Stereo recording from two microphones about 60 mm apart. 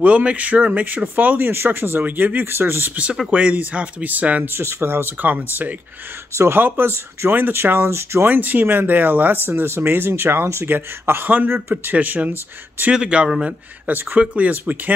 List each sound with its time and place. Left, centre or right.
0.0 s speech: right
3.3 s speech: right
4.6 s speech: right
6.3 s speech: right
8.3 s speech: right
11.2 s speech: right
12.9 s speech: centre